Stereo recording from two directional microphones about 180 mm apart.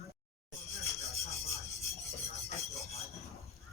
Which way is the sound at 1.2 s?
35° left (ahead or behind).